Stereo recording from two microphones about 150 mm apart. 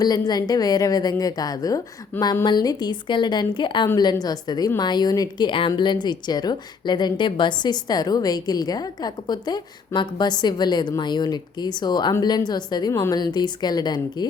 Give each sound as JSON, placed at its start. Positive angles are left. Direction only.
{"t": 0.0, "sound": "speech", "side_deg": 25}